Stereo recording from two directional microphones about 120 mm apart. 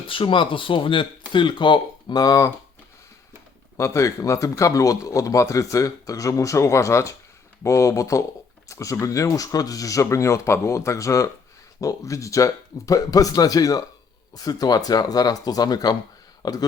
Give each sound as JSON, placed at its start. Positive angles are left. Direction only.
{"t": 0.1, "sound": "speech", "side_deg": 45}
{"t": 3.8, "sound": "speech", "side_deg": 25}